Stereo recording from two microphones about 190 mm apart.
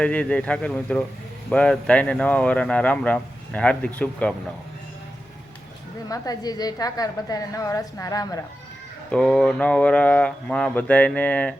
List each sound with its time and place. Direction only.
0.0 s speech: 5° left (ahead or behind)
6.1 s a woman's voice: 20° left (ahead or behind)
9.1 s speech: 5° left (ahead or behind)